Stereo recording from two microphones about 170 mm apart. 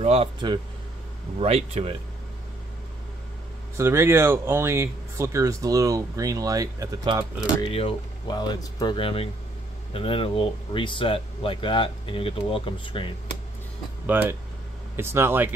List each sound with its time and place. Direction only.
0.0 s speech: 35° right (ahead or behind)
3.7 s speech: 15° right (ahead or behind)
7.6 s speech: 35° left (ahead or behind)
14.1 s speech: 10° right (ahead or behind)